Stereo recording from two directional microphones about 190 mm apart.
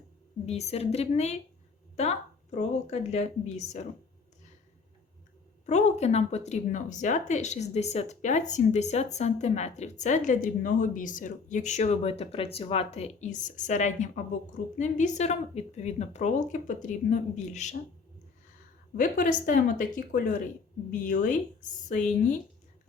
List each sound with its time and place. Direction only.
0.4 s speech: 35° left (ahead or behind)
5.6 s speech: 35° left (ahead or behind)
18.9 s speech: 45° left (ahead or behind)